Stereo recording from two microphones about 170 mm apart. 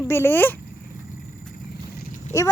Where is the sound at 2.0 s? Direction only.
50° left (ahead or behind).